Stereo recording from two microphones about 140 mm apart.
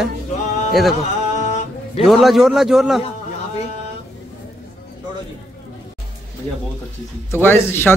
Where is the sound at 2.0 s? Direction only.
Centre (ahead or behind).